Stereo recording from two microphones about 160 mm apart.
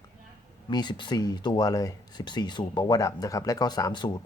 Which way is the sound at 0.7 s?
25° left (ahead or behind).